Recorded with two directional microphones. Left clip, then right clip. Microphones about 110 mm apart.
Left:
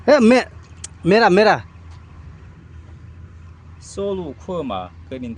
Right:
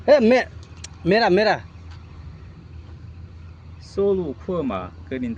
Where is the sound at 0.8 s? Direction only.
65° left (ahead or behind).